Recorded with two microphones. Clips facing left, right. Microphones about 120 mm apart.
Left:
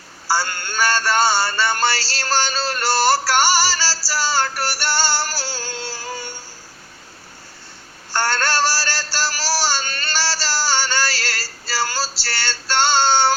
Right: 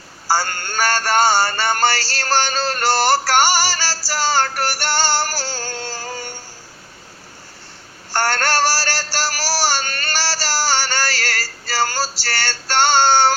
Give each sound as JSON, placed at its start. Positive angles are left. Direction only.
{"t": 0.3, "sound": "speech", "side_deg": -45}
{"t": 4.1, "sound": "synthetic singing", "side_deg": -45}
{"t": 8.1, "sound": "a sound", "side_deg": -45}
{"t": 12.2, "sound": "music", "side_deg": -45}